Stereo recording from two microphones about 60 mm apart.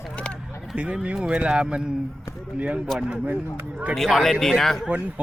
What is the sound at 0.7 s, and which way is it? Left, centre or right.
Speech, centre.